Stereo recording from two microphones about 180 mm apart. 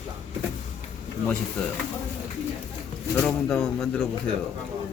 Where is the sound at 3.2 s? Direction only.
5° left (ahead or behind).